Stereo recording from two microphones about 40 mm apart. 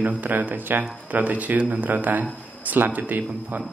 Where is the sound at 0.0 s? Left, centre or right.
Right.